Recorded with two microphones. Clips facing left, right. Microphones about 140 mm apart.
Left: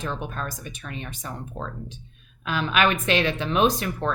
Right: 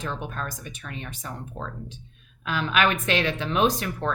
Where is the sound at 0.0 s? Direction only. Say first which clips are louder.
Left 1 dB; 20° left (ahead or behind).